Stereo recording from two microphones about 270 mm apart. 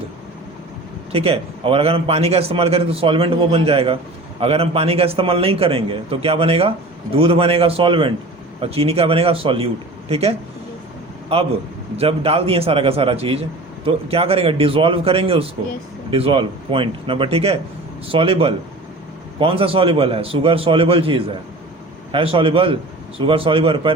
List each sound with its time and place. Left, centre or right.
1.1 s a man's voice: right